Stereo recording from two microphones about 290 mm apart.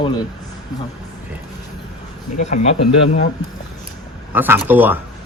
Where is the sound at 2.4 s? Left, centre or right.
Left.